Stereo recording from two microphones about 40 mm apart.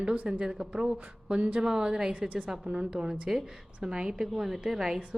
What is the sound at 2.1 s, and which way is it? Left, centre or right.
A woman's voice, right.